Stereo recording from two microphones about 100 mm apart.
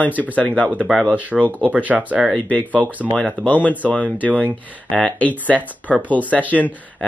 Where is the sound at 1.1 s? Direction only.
15° right (ahead or behind).